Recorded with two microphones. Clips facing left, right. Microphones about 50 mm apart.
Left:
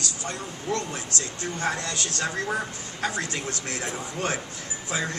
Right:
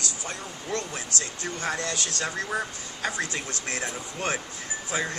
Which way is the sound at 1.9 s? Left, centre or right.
Left.